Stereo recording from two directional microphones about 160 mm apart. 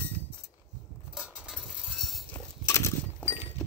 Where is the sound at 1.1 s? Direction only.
5° right (ahead or behind).